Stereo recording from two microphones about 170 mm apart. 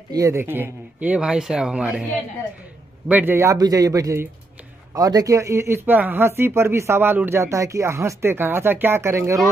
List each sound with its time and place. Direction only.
0.1 s speech: 15° right (ahead or behind)
3.1 s a man's voice: 10° right (ahead or behind)